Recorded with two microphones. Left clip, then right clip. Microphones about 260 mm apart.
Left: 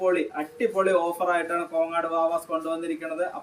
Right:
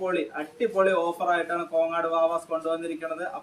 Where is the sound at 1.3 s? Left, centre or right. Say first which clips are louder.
Even; centre.